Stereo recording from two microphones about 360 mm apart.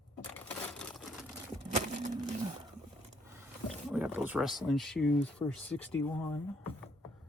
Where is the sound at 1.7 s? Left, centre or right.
Centre.